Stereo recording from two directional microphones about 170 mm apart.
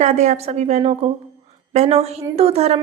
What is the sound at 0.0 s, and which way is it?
Speech, 40° right (ahead or behind).